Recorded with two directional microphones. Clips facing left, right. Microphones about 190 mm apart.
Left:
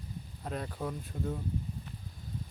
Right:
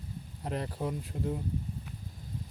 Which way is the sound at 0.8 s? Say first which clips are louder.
Right 2 dB; 10° right (ahead or behind).